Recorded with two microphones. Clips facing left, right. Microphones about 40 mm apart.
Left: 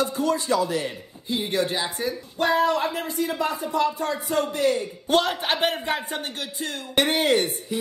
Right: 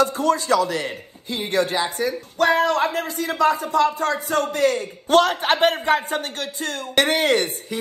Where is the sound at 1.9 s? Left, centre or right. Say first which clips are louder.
Right 4 dB; right.